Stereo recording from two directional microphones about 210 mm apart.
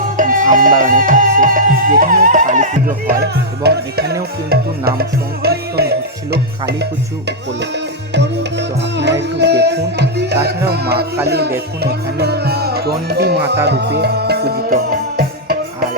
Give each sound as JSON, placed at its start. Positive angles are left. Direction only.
{"t": 0.2, "sound": "music", "side_deg": -40}
{"t": 3.1, "sound": "music", "side_deg": -50}
{"t": 8.1, "sound": "music", "side_deg": -55}